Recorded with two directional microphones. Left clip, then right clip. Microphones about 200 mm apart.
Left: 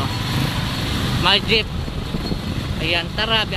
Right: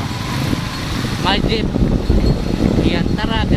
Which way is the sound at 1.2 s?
10° left (ahead or behind).